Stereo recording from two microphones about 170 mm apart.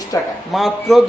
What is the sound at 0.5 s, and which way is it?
Speech, centre (ahead or behind).